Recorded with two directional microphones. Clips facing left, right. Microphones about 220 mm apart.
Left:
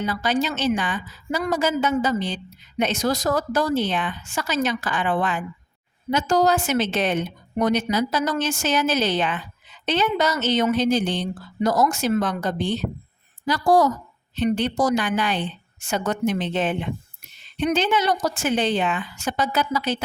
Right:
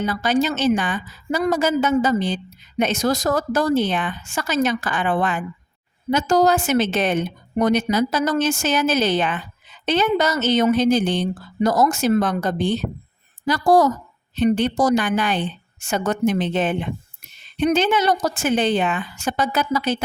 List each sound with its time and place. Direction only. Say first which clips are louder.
0.0 s a woman's voice: right 3 dB; 50° right (ahead or behind)